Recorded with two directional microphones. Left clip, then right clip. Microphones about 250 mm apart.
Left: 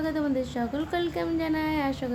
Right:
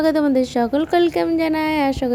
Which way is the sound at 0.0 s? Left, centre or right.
Right.